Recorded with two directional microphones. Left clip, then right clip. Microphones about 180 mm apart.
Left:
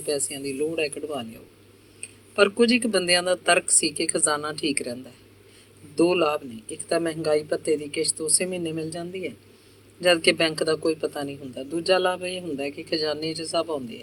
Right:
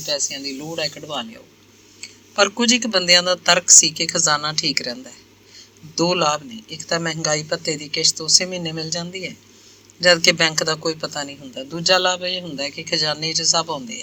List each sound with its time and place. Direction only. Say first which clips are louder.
0.0 s a man's voice: right 4 dB; 15° right (ahead or behind)